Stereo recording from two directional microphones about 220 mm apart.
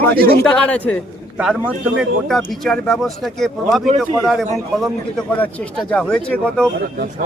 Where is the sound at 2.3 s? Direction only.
Centre (ahead or behind).